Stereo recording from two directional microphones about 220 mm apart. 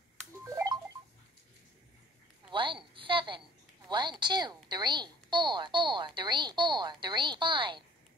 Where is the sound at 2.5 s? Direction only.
20° right (ahead or behind).